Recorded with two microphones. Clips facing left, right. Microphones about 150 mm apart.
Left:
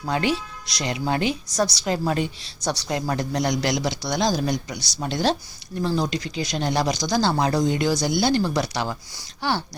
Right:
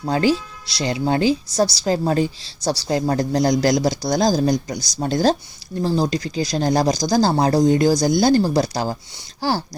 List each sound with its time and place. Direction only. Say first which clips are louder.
0.1 s speech: right 5 dB; 35° right (ahead or behind)